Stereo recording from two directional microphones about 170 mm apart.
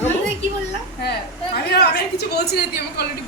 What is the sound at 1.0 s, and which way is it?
A woman's voice, 70° left (ahead or behind).